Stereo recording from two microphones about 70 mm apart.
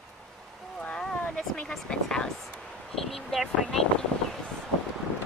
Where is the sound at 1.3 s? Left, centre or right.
Centre.